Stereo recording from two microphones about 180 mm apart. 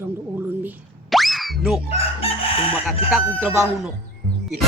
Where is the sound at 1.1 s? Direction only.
Centre (ahead or behind).